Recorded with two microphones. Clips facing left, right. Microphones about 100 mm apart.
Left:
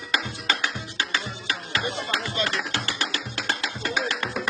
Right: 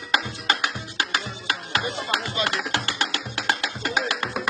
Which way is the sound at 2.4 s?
50° right (ahead or behind).